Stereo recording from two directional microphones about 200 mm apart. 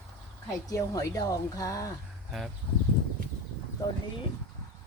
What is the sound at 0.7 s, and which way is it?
Speech, 15° left (ahead or behind).